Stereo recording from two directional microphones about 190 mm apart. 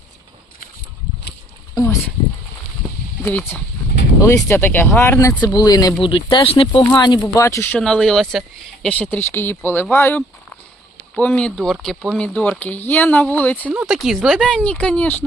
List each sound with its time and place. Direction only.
1.7 s a sound: 15° left (ahead or behind)
3.2 s speech: 10° left (ahead or behind)
13.7 s speech: 5° right (ahead or behind)